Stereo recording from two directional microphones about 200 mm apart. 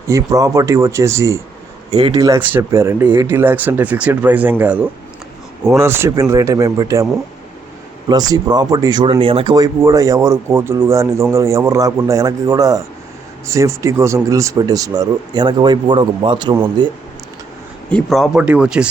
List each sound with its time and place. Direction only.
0.1 s speech: 15° right (ahead or behind)
8.1 s speech: 20° right (ahead or behind)
17.8 s speech: 5° left (ahead or behind)